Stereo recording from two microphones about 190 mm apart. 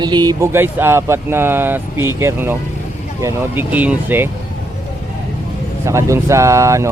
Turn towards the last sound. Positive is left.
turn(degrees=-15)  # may be behind; listen again after turning